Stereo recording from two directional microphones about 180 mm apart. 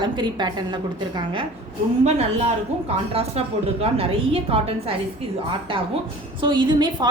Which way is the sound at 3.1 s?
35° right (ahead or behind).